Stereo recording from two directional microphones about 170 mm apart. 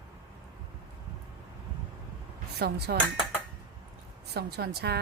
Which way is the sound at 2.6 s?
75° right (ahead or behind).